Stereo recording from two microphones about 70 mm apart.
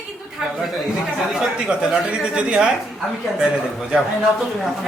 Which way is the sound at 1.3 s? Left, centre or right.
Centre.